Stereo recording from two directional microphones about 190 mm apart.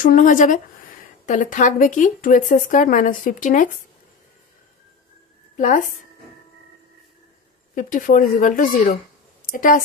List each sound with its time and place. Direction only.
0.0 s speech: 45° left (ahead or behind)
5.6 s a woman's voice: 40° left (ahead or behind)
7.7 s speech: 45° left (ahead or behind)
9.4 s a sound: 45° left (ahead or behind)